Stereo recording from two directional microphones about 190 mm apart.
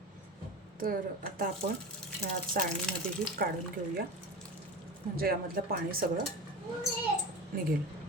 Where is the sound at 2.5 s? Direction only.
50° right (ahead or behind).